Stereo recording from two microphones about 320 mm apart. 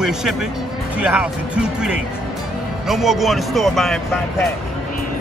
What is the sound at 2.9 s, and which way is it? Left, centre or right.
Speech, centre.